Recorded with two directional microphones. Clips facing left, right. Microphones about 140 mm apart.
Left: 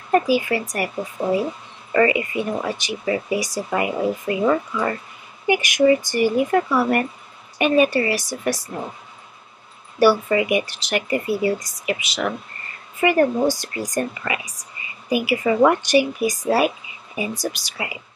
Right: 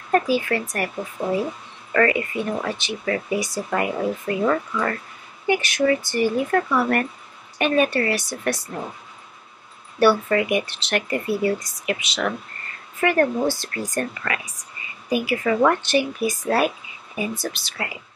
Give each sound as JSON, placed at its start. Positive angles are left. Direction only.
{"t": 0.1, "sound": "speech", "side_deg": 10}
{"t": 9.9, "sound": "speech", "side_deg": 5}